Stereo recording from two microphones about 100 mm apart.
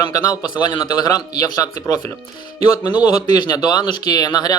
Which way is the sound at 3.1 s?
45° left (ahead or behind).